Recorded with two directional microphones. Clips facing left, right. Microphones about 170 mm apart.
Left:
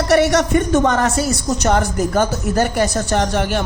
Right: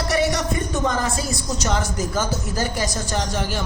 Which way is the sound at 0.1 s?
70° left (ahead or behind).